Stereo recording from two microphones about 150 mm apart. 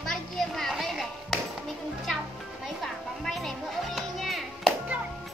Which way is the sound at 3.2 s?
Centre (ahead or behind).